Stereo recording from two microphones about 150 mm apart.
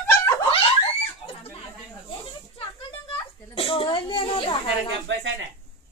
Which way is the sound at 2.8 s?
35° left (ahead or behind).